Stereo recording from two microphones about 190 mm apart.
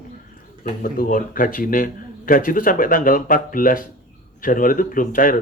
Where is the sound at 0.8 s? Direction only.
50° left (ahead or behind).